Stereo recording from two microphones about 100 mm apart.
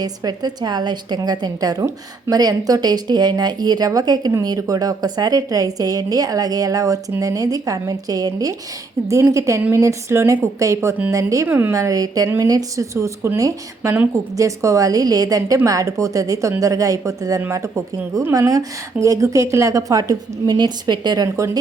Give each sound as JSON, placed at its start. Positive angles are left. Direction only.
{"t": 0.0, "sound": "a woman's voice", "side_deg": -40}
{"t": 11.4, "sound": "speech", "side_deg": -20}
{"t": 11.7, "sound": "a woman's voice", "side_deg": -35}
{"t": 21.3, "sound": "a woman's voice", "side_deg": -30}